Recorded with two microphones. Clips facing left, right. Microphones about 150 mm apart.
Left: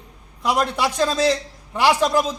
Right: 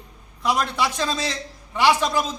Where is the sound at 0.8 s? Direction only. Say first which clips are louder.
Left 5 dB; 35° left (ahead or behind).